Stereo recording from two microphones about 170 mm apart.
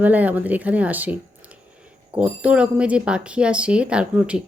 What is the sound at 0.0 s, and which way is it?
Speech, 10° right (ahead or behind).